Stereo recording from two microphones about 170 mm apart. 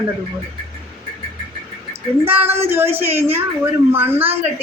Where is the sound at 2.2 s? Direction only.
10° right (ahead or behind).